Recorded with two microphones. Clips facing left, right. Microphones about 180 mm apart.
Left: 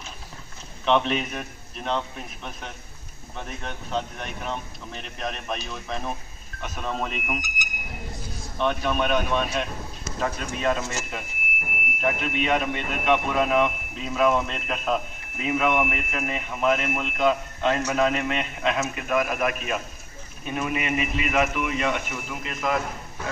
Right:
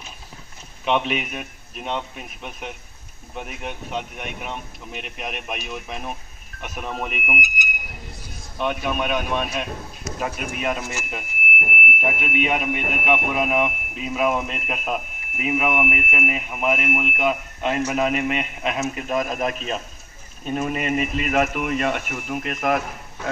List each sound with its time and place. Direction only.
0.8 s speech: 10° right (ahead or behind)
8.5 s speech: 10° right (ahead or behind)
12.0 s speech: 15° right (ahead or behind)
20.4 s speech: 40° right (ahead or behind); by 22.8 s 60° right (ahead or behind)